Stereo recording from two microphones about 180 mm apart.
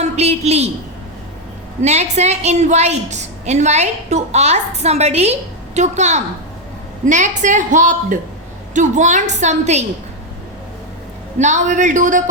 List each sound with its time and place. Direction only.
0.0 s a sound: 35° right (ahead or behind)
1.8 s a woman's voice: 40° right (ahead or behind)
11.3 s a woman's voice: 40° right (ahead or behind)